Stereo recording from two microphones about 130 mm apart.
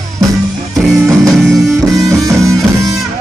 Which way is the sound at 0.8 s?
Centre (ahead or behind).